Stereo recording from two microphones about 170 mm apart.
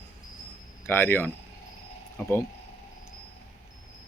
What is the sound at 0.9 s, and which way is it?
Speech, 10° left (ahead or behind).